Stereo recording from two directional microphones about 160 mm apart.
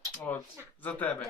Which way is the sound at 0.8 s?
10° left (ahead or behind).